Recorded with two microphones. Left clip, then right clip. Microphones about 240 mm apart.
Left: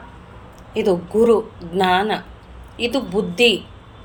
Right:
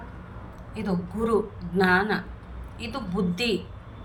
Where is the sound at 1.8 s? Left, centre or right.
Centre.